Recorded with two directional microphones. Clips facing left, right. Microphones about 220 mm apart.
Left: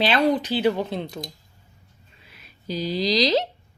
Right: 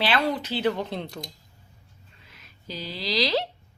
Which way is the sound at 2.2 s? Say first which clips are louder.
Left 7 dB; 10° left (ahead or behind).